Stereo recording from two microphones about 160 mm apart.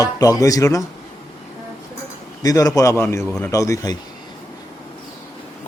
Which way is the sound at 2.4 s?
20° left (ahead or behind).